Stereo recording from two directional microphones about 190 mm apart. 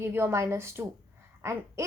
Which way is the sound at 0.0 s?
15° right (ahead or behind).